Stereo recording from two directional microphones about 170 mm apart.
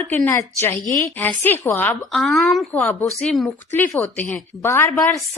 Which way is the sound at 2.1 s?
Centre (ahead or behind).